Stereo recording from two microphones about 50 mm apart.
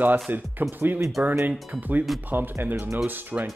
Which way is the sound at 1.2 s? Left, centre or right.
Centre.